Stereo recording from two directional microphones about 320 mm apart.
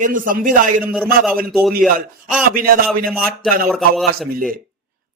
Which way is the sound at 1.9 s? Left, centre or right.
Right.